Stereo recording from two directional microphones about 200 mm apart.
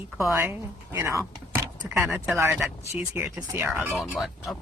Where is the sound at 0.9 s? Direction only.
15° right (ahead or behind).